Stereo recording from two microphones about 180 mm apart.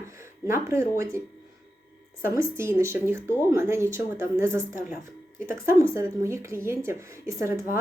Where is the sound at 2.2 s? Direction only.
15° right (ahead or behind).